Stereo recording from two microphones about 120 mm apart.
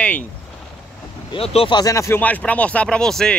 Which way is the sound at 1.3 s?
55° left (ahead or behind).